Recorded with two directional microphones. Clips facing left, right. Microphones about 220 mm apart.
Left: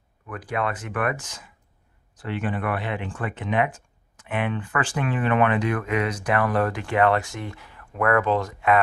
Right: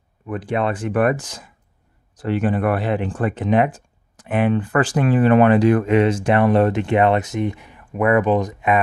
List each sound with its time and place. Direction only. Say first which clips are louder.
0.3 s speech: right 6 dB; 25° right (ahead or behind)